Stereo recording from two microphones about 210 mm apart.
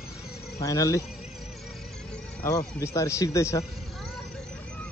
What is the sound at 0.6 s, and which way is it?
Speech, 15° left (ahead or behind).